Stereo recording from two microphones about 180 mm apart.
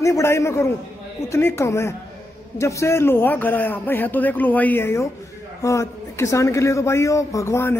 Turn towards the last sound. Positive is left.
turn(degrees=15)  # may be behind; listen again after turning